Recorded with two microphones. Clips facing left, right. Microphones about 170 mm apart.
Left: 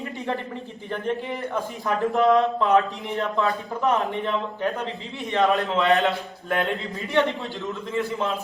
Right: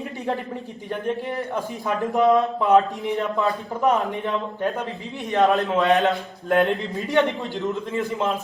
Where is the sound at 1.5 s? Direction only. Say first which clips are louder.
Even; 15° right (ahead or behind).